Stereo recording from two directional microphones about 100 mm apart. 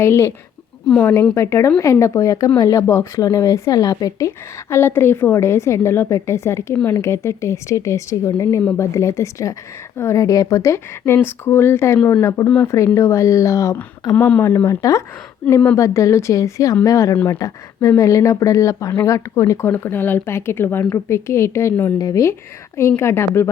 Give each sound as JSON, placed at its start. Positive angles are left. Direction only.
{"t": 0.0, "sound": "a woman's voice", "side_deg": 30}
{"t": 4.7, "sound": "a woman's voice", "side_deg": 25}
{"t": 14.2, "sound": "a woman's voice", "side_deg": 20}
{"t": 21.9, "sound": "a woman's voice", "side_deg": 35}